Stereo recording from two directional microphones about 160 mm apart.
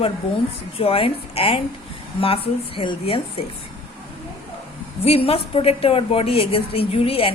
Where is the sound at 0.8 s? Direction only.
35° left (ahead or behind).